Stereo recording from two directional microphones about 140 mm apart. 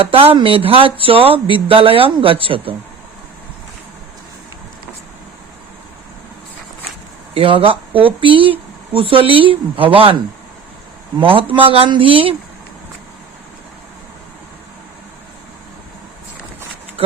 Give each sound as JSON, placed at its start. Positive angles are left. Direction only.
{"t": 0.0, "sound": "speech", "side_deg": -40}
{"t": 7.3, "sound": "speech", "side_deg": -40}
{"t": 11.2, "sound": "speech", "side_deg": -40}